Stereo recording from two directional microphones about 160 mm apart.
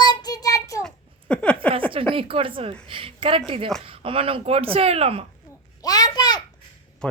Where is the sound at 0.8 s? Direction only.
5° left (ahead or behind).